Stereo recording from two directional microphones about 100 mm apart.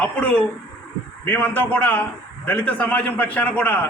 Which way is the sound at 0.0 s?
15° left (ahead or behind).